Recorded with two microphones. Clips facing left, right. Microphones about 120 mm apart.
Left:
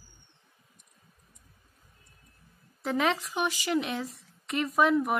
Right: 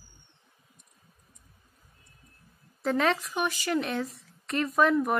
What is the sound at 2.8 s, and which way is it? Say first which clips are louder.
A woman's voice: right 2 dB; 15° left (ahead or behind).